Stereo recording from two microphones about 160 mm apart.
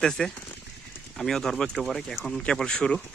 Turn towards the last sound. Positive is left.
turn(degrees=5)  # may be behind; listen again after turning